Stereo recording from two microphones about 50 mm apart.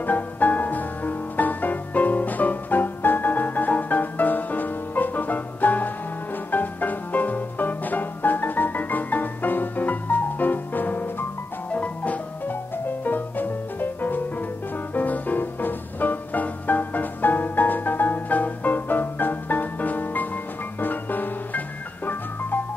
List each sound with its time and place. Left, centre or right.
0.0 s music: left
11.7 s music: left